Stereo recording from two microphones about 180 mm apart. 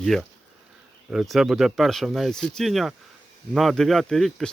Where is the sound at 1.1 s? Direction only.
Centre (ahead or behind).